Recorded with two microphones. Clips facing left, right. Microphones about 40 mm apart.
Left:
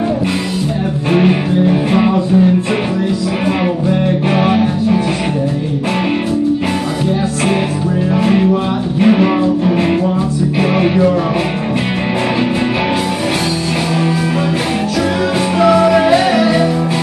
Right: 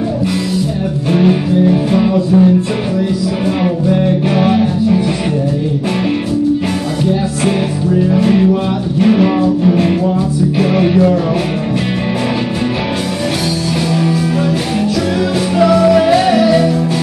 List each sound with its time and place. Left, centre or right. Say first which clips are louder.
1.1 s music: right 1 dB; left
3.9 s music: right 1 dB; centre
8.1 s music: left 1 dB; centre
15.6 s music: right 1 dB; centre